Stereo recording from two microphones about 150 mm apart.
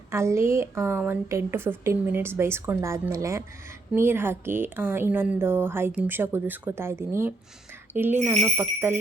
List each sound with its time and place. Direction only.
0.1 s a woman's voice: 20° right (ahead or behind)